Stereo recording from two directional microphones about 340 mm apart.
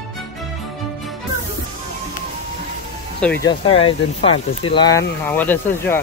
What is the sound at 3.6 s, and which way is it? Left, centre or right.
Speech, centre.